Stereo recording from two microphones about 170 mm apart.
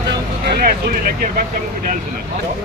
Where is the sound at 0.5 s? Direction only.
60° right (ahead or behind).